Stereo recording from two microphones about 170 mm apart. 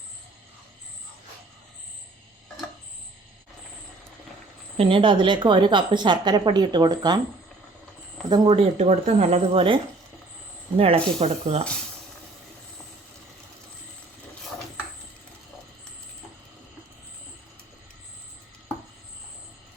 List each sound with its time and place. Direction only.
4.8 s a woman's voice: 30° right (ahead or behind)
8.4 s speech: 35° right (ahead or behind)